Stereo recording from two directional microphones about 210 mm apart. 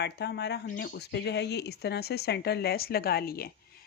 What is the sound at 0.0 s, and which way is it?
Speech, 55° left (ahead or behind).